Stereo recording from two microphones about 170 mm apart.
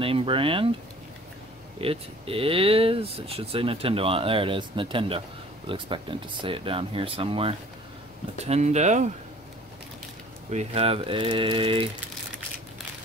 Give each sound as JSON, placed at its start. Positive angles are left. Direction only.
{"t": 0.0, "sound": "speech", "side_deg": -30}
{"t": 1.8, "sound": "speech", "side_deg": -35}
{"t": 10.5, "sound": "speech", "side_deg": -40}